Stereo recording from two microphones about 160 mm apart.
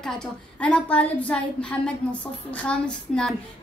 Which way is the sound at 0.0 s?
5° left (ahead or behind).